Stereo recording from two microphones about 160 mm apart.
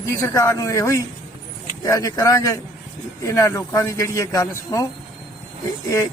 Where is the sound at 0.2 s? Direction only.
20° left (ahead or behind).